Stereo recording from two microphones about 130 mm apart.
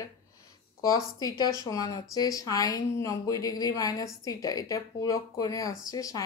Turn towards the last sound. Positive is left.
turn(degrees=25)  # may be behind; listen again after turning